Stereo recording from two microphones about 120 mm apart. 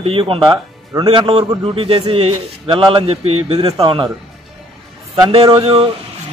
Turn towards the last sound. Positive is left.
turn(degrees=-45)  # may be behind; listen again after turning